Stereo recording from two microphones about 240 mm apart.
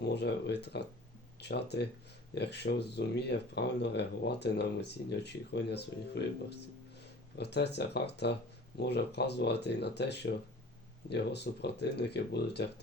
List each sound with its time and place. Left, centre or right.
0.1 s speech: left